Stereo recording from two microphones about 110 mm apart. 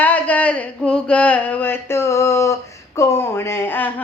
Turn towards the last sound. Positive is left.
turn(degrees=20)  # may be behind; listen again after turning